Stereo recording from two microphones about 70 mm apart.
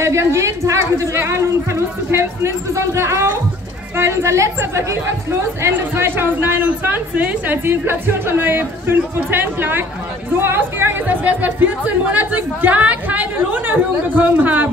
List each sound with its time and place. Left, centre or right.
0.0 s a woman's voice: right